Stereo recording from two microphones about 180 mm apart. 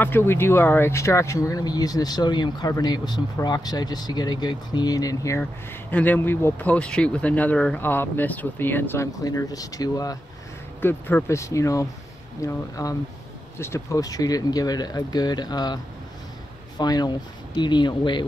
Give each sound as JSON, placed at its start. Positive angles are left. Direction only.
{"t": 0.0, "sound": "speech", "side_deg": 10}